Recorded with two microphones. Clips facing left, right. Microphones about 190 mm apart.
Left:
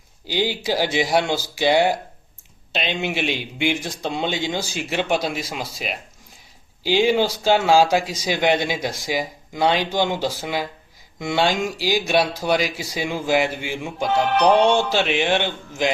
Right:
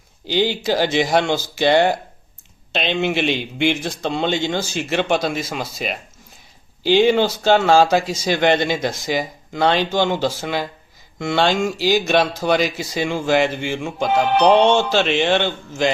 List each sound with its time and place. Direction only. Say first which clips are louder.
0.3 s speech: right 4 dB; 10° left (ahead or behind)
14.3 s speech: right 3 dB; 30° right (ahead or behind)
14.9 s speech: right 3 dB; 10° left (ahead or behind)